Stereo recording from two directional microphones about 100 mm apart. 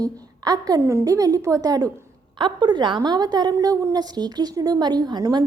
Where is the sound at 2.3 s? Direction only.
50° right (ahead or behind).